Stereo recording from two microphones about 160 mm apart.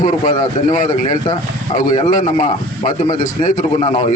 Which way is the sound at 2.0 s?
50° left (ahead or behind).